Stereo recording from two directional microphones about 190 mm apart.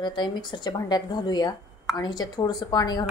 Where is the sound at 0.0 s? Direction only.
25° left (ahead or behind).